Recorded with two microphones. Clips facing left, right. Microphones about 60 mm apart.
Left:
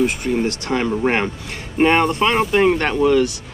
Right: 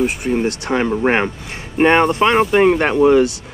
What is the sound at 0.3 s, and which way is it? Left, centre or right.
Speech, centre.